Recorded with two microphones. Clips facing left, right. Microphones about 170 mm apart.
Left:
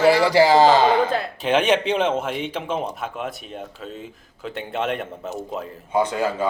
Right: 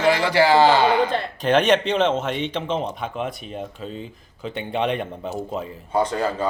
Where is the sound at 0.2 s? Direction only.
40° left (ahead or behind).